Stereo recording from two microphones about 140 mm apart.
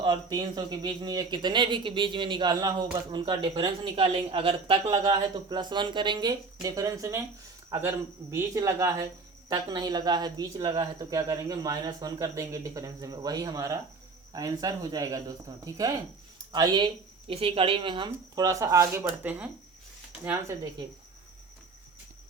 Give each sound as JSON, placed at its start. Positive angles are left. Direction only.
{"t": 0.0, "sound": "speech", "side_deg": -30}
{"t": 16.5, "sound": "speech", "side_deg": -30}
{"t": 19.0, "sound": "speech", "side_deg": -10}